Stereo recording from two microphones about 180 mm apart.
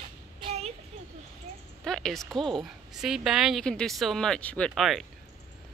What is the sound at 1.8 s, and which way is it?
A woman's voice, 5° left (ahead or behind).